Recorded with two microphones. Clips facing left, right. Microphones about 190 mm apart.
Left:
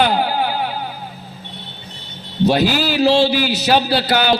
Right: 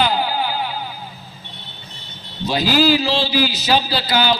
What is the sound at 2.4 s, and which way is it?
A man's voice, 60° left (ahead or behind).